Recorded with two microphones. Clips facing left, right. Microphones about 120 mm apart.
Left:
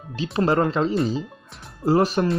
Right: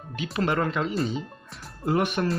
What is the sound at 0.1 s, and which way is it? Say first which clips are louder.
Speech: left 5 dB; 30° left (ahead or behind).